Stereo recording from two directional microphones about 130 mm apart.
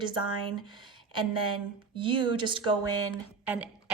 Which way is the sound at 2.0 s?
40° right (ahead or behind).